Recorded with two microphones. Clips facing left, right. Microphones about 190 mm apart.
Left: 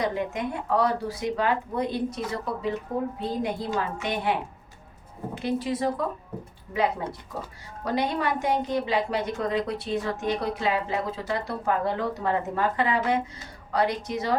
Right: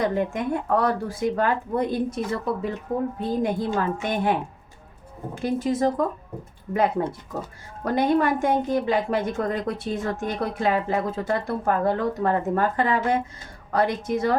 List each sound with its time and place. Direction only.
0.0 s a woman's voice: 50° right (ahead or behind)
7.9 s a woman's voice: 50° right (ahead or behind)